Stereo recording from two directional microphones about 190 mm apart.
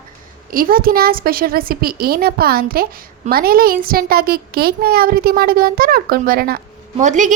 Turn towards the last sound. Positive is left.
turn(degrees=-40)  # may be behind; listen again after turning